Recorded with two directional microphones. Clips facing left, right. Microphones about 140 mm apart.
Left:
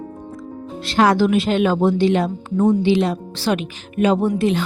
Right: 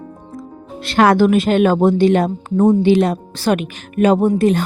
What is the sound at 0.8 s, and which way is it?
A woman's voice, 55° right (ahead or behind).